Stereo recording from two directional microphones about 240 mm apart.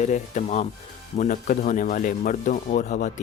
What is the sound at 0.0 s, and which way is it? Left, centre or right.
Speech, left.